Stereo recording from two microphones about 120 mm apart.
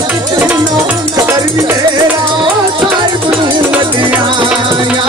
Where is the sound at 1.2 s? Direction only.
25° right (ahead or behind).